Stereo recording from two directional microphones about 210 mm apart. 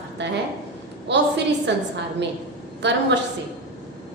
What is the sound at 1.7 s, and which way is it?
Speech, 55° right (ahead or behind).